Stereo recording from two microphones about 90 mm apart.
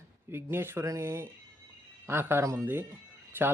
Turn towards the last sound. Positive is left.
turn(degrees=-20)  # may be behind; listen again after turning